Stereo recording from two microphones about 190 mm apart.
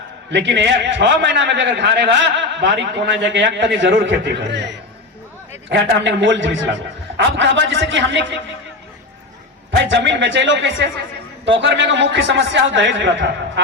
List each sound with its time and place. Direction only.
0.3 s a man's voice: 65° right (ahead or behind)
9.9 s a man's voice: 80° right